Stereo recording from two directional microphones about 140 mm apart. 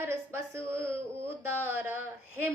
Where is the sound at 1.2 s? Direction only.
15° right (ahead or behind).